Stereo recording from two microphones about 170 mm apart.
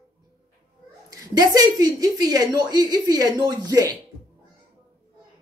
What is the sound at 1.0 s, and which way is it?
A woman's voice, 20° right (ahead or behind).